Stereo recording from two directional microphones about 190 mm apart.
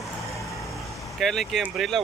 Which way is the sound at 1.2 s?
Centre (ahead or behind).